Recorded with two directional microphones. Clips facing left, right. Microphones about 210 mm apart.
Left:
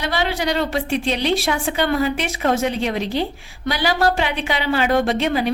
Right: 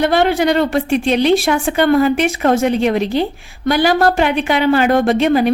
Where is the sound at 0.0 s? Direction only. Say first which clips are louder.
Right 9 dB; 55° right (ahead or behind).